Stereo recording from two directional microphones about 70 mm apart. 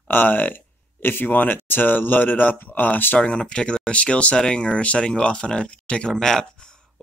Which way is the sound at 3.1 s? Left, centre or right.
Centre.